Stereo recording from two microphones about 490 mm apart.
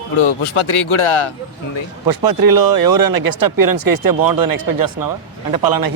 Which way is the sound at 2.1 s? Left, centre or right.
Right.